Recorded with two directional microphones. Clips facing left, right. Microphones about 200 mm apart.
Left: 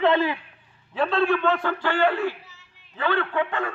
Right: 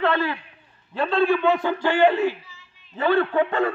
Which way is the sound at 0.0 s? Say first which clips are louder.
Left 2 dB; 15° left (ahead or behind).